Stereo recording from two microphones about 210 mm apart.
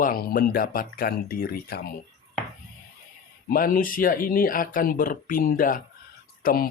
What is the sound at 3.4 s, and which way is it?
A man's voice, 45° left (ahead or behind).